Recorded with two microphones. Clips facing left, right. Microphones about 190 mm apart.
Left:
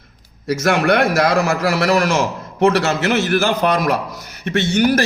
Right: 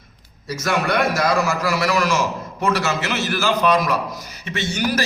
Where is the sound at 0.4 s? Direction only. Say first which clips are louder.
Left 6 dB; 65° left (ahead or behind).